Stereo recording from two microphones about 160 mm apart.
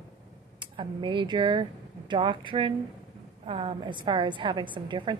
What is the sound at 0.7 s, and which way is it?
A woman's voice, 30° right (ahead or behind).